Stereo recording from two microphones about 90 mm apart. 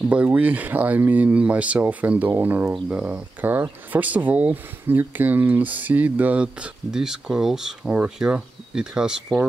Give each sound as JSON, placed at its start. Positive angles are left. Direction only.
{"t": 0.1, "sound": "speech", "side_deg": -15}